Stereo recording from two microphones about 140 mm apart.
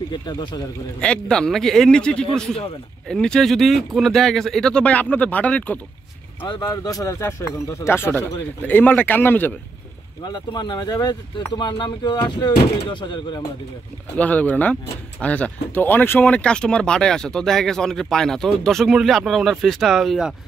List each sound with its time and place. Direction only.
0.1 s speech: 35° left (ahead or behind)
1.0 s speech: 5° left (ahead or behind)
6.4 s speech: 30° left (ahead or behind); by 9.5 s 15° left (ahead or behind)
10.2 s speech: 30° left (ahead or behind)
14.1 s speech: 10° left (ahead or behind)